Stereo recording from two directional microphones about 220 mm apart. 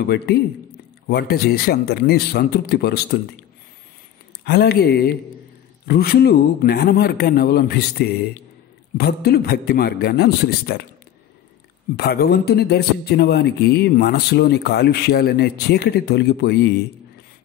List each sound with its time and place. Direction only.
0.0 s speech: 45° left (ahead or behind)
4.5 s speech: 45° left (ahead or behind)
12.0 s speech: 45° left (ahead or behind)